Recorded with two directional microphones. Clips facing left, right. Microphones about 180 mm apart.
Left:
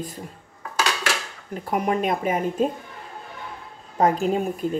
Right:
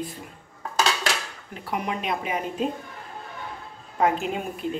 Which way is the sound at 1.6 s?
45° left (ahead or behind).